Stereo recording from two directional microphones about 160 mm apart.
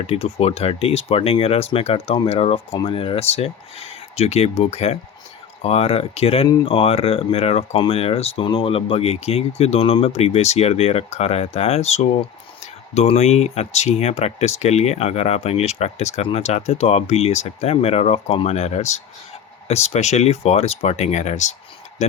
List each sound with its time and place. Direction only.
0.0 s speech: 40° left (ahead or behind)